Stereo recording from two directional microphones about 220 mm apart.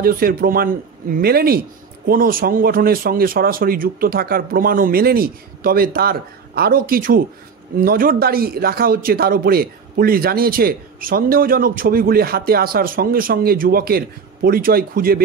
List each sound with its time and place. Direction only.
0.0 s speech: 40° right (ahead or behind)